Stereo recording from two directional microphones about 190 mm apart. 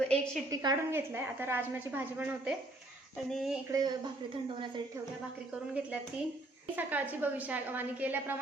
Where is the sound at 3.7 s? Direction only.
20° right (ahead or behind).